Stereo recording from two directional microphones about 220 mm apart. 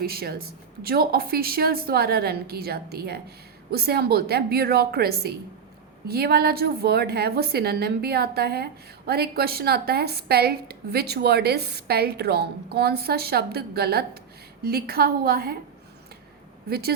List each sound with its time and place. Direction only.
0.0 s a woman's voice: 45° right (ahead or behind)
16.6 s a woman's voice: 45° right (ahead or behind)